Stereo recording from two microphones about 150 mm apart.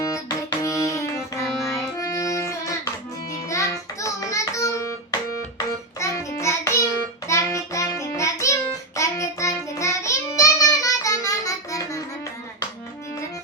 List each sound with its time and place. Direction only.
0.0 s music: 20° left (ahead or behind)
6.0 s child singing: 20° left (ahead or behind)